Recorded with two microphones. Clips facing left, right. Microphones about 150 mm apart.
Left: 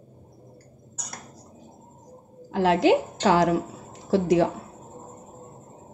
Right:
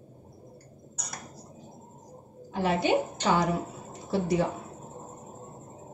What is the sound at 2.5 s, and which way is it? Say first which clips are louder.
A woman's voice: left 6 dB; 90° left.